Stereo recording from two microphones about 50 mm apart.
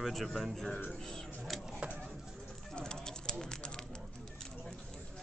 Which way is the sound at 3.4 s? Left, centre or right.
Centre.